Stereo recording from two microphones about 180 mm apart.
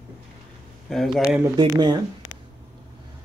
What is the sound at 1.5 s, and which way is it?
Speech, 25° right (ahead or behind).